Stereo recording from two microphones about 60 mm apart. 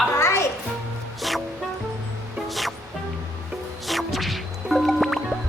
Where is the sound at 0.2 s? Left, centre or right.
Left.